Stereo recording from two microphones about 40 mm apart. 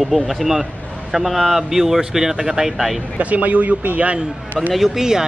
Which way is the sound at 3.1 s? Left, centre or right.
Right.